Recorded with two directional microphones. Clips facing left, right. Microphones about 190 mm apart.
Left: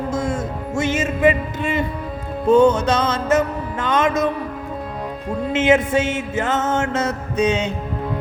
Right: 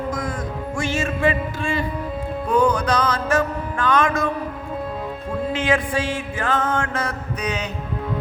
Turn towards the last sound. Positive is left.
turn(degrees=25)  # may be behind; listen again after turning